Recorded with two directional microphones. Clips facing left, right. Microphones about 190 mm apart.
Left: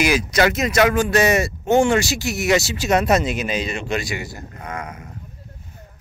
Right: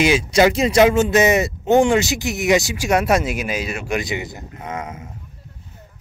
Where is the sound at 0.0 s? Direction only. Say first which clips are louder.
Right 3 dB; 30° right (ahead or behind); by 4.0 s 10° right (ahead or behind).